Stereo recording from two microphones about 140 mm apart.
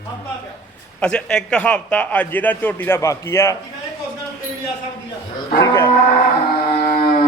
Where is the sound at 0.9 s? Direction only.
10° left (ahead or behind).